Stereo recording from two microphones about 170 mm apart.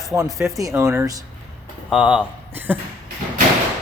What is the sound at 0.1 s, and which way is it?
Speech, 20° right (ahead or behind).